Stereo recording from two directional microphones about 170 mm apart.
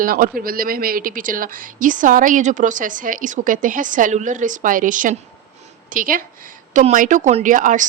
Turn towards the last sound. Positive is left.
turn(degrees=-50)  # may be behind; listen again after turning